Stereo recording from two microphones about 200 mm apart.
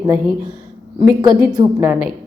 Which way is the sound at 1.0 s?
20° right (ahead or behind).